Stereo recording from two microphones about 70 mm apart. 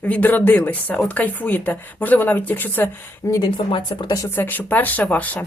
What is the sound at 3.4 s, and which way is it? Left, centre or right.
Speech, left.